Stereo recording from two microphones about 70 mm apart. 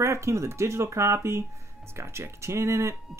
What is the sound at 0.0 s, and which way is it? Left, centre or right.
Speech, right.